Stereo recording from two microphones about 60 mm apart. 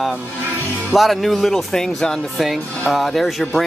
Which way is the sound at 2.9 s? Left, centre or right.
Centre.